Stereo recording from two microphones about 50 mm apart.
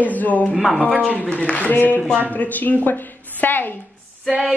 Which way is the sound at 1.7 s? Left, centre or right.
Left.